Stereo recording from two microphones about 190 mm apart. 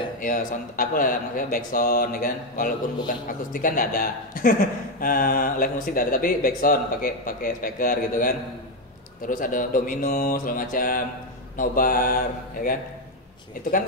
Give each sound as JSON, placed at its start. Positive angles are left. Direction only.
{"t": 0.2, "sound": "speech", "side_deg": 45}